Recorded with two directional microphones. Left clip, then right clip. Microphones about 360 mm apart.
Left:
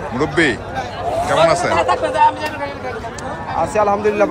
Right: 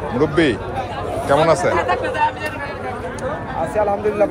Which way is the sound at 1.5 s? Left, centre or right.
Centre.